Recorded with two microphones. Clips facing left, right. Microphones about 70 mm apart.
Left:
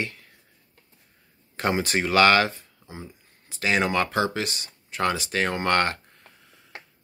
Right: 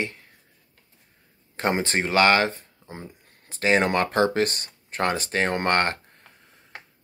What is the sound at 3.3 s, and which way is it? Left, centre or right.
Speech, right.